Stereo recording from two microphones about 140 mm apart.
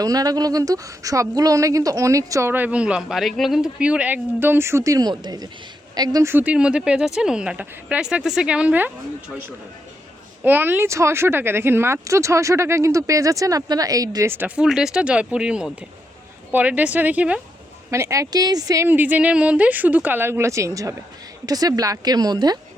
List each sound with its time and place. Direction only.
0.0 s a woman's voice: 25° right (ahead or behind)
6.3 s speech: 10° right (ahead or behind)
10.4 s speech: 15° right (ahead or behind)
17.9 s a woman's voice: 20° right (ahead or behind)
18.9 s a woman's voice: 15° right (ahead or behind); by 22.5 s 30° right (ahead or behind)